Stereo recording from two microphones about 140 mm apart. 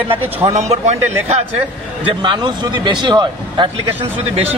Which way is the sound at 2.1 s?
35° right (ahead or behind).